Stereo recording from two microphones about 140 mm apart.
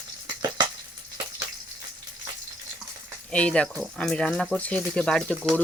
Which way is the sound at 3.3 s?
10° left (ahead or behind).